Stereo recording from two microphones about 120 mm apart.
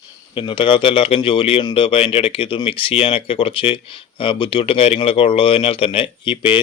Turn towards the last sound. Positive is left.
turn(degrees=45)  # may be behind; listen again after turning